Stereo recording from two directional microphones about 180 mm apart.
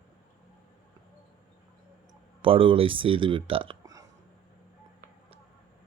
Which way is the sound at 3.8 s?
20° right (ahead or behind).